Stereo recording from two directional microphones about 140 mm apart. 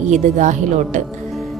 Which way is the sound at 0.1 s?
60° right (ahead or behind).